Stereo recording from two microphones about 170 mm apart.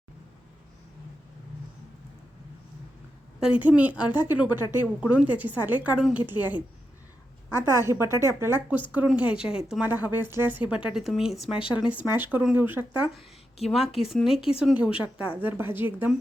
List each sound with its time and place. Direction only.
3.6 s a woman's voice: 10° right (ahead or behind)
7.7 s a woman's voice: 15° right (ahead or behind)
11.6 s a woman's voice: 25° left (ahead or behind)
12.1 s a woman's voice: 10° right (ahead or behind)
13.7 s speech: centre (ahead or behind)
14.8 s a woman's voice: 30° left (ahead or behind)
15.4 s a woman's voice: 10° right (ahead or behind)